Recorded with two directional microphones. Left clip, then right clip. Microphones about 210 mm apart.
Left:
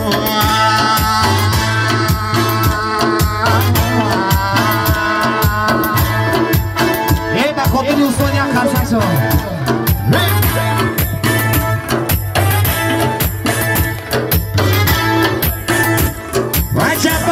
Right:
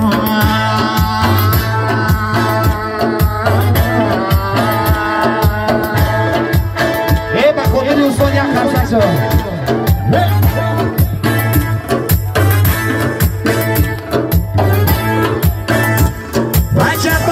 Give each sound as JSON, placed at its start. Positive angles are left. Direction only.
{"t": 0.1, "sound": "music", "side_deg": 50}
{"t": 2.4, "sound": "music", "side_deg": 10}
{"t": 4.3, "sound": "music", "side_deg": 10}
{"t": 12.4, "sound": "music", "side_deg": 25}
{"t": 15.9, "sound": "music", "side_deg": 30}